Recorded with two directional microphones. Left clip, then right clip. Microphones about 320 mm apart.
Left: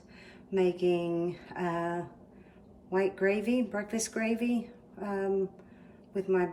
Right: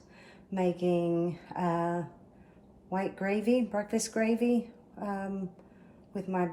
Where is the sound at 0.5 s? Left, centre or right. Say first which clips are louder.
Left 2 dB; centre.